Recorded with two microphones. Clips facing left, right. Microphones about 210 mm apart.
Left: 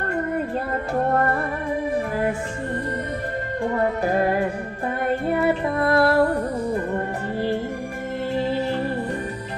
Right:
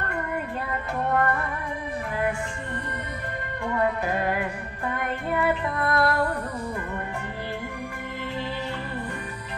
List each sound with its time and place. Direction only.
1.1 s music: 30° left (ahead or behind)
3.6 s music: 30° left (ahead or behind)
8.5 s music: 30° left (ahead or behind)